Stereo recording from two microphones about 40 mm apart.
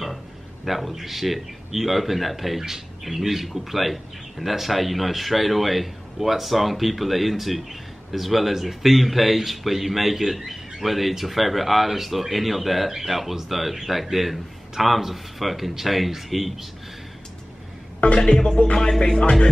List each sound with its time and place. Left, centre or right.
0.7 s speech: centre
18.0 s speech: left
18.8 s music: centre